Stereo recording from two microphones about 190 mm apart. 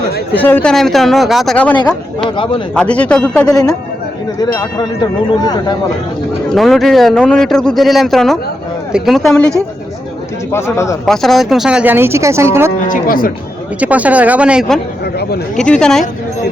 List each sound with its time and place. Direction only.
0.3 s speech: 10° left (ahead or behind)
2.3 s speech: 25° left (ahead or behind)
2.7 s speech: 5° left (ahead or behind)
6.5 s speech: centre (ahead or behind)
10.5 s a man's voice: 15° left (ahead or behind)
11.0 s speech: centre (ahead or behind); by 12.5 s 15° right (ahead or behind)
12.9 s speech: 45° left (ahead or behind)
13.7 s speech: 5° right (ahead or behind)